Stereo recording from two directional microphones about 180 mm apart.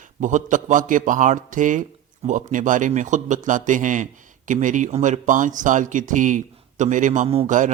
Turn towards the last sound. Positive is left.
turn(degrees=-45)  # may be behind; listen again after turning